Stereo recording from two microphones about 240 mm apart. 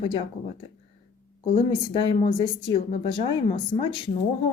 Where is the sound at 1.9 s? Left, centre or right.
Left.